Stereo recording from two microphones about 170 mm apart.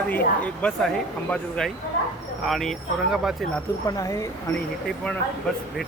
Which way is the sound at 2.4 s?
Centre (ahead or behind).